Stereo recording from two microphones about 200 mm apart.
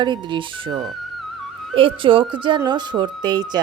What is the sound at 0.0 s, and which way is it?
A woman's voice, 25° right (ahead or behind).